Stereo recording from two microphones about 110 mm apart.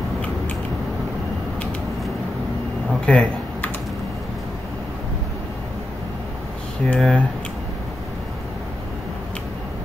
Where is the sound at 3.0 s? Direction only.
10° left (ahead or behind).